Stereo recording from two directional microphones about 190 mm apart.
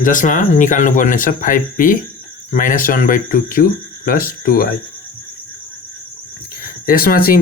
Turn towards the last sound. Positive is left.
turn(degrees=50)  # may be behind; listen again after turning